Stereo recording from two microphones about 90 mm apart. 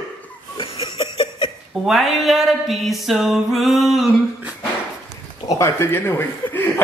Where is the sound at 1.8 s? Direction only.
Centre (ahead or behind).